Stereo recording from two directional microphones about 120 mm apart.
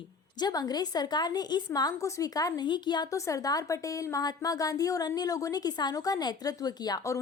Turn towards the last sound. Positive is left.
turn(degrees=35)  # may be behind; listen again after turning